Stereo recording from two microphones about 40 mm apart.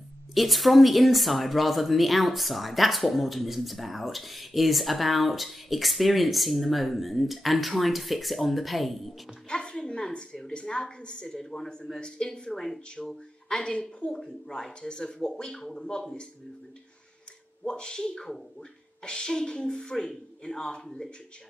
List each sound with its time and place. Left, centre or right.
0.3 s speech: centre
9.5 s a woman's voice: centre
17.6 s a woman's voice: centre